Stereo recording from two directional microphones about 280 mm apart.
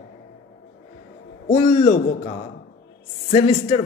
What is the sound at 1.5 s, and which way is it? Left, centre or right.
Speech, left.